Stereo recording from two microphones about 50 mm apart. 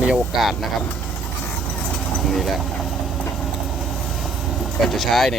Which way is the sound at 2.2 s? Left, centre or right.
Centre.